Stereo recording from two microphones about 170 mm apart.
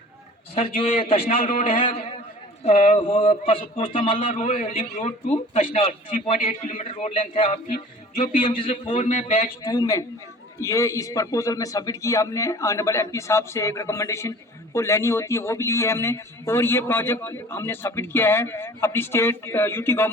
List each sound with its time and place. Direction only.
0.5 s a man's voice: 35° left (ahead or behind)
2.6 s a man's voice: 45° left (ahead or behind)
3.0 s a man's voice: 30° left (ahead or behind)
7.4 s a man's voice: 45° left (ahead or behind)
8.4 s a man's voice: 35° left (ahead or behind)
9.6 s a man's voice: 20° left (ahead or behind)